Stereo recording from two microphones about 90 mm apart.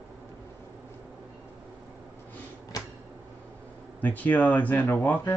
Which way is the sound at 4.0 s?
20° left (ahead or behind).